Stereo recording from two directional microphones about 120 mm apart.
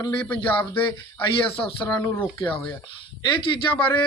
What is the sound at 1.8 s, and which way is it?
Speech, 20° left (ahead or behind).